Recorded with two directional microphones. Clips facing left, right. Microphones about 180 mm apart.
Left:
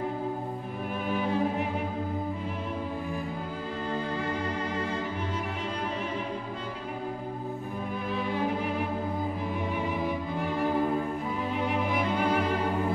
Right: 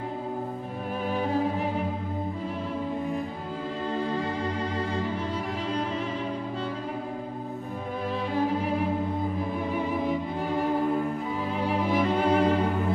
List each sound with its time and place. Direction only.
11.6 s music: 30° right (ahead or behind)